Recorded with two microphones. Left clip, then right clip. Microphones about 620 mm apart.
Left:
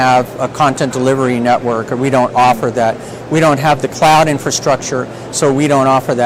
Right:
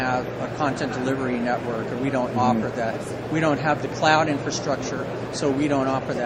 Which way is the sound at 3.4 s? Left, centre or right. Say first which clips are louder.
Left 11 dB; left.